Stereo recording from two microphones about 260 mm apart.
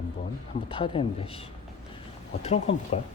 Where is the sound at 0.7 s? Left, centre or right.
Centre.